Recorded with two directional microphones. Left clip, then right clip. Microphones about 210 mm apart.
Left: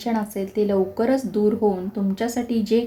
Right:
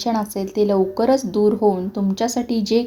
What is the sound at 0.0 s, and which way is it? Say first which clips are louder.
Speech: right 3 dB; 25° right (ahead or behind).